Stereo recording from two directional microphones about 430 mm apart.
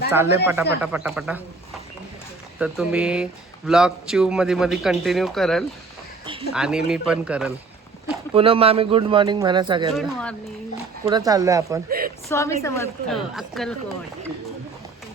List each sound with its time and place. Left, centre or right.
0.1 s a man's voice: centre
8.0 s speech: centre
9.9 s a man's voice: centre
11.9 s a woman's voice: centre
12.3 s a woman's voice: centre